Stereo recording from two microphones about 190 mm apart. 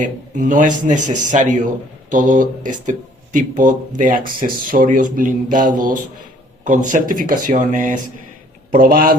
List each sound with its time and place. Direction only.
0.0 s a man's voice: 45° right (ahead or behind)